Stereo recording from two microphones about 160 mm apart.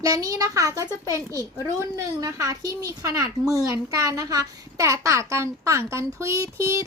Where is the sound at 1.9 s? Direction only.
20° right (ahead or behind).